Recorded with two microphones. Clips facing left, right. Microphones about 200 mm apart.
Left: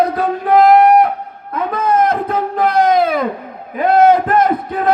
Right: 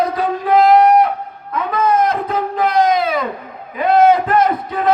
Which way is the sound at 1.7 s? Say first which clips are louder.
Left 1 dB; 55° left (ahead or behind).